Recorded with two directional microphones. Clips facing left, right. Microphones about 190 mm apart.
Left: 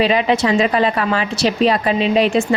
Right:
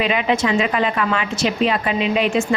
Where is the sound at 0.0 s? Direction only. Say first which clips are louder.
Left 4 dB; 35° left (ahead or behind).